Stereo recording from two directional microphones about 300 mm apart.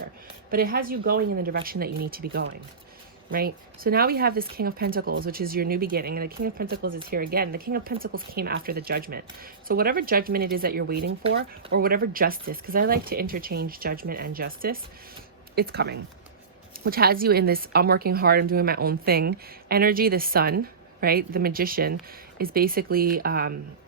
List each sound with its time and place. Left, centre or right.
0.5 s speech: right